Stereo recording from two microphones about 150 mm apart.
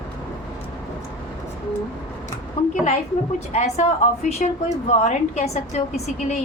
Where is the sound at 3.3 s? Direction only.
45° left (ahead or behind).